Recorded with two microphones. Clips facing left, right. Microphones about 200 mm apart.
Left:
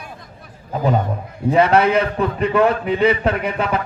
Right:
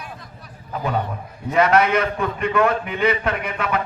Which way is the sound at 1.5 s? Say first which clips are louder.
Left 3 dB; 30° left (ahead or behind).